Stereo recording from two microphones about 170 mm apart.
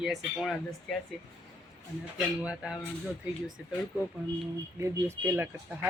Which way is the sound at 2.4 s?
5° right (ahead or behind).